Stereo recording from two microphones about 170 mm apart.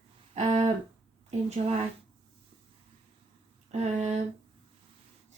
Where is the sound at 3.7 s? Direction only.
40° right (ahead or behind).